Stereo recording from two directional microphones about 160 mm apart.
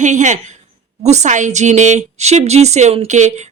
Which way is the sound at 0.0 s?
50° right (ahead or behind).